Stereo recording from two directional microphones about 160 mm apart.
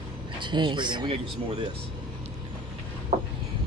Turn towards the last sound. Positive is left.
turn(degrees=-45)  # may be behind; listen again after turning